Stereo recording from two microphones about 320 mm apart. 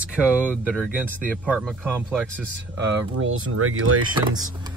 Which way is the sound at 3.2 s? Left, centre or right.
Right.